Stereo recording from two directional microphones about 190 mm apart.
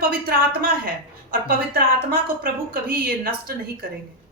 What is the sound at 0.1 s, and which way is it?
Speech, 50° right (ahead or behind).